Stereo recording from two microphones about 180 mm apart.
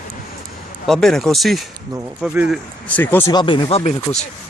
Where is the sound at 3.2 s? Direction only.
25° left (ahead or behind).